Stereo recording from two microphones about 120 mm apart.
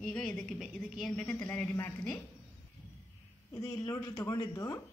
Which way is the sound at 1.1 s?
10° left (ahead or behind).